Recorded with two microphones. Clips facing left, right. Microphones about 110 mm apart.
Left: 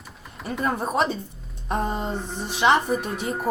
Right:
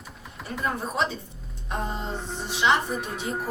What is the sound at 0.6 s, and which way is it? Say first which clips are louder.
Speech: left 4 dB; 55° left (ahead or behind).